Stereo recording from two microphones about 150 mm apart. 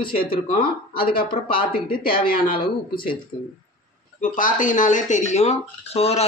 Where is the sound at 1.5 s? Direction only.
80° left.